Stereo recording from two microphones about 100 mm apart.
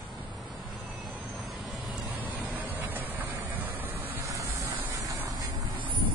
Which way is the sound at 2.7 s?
20° right (ahead or behind).